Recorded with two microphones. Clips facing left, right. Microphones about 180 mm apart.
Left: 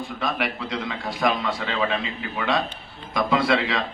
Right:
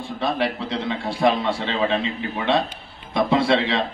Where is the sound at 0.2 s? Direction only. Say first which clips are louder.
Right 5 dB; 30° right (ahead or behind).